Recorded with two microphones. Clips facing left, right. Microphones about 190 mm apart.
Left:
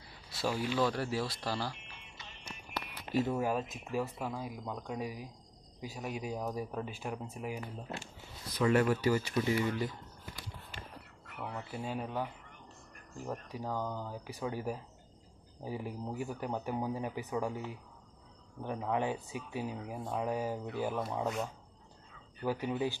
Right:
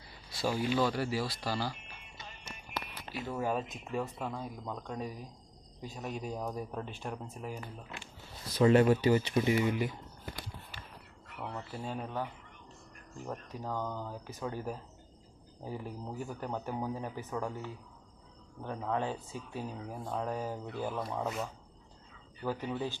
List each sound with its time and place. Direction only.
0.3 s speech: centre (ahead or behind)
1.9 s music: 50° right (ahead or behind)
3.2 s speech: 15° left (ahead or behind)
3.5 s speech: 5° left (ahead or behind)
8.5 s speech: 25° right (ahead or behind)
11.3 s speech: 5° left (ahead or behind)
22.4 s speech: 10° left (ahead or behind)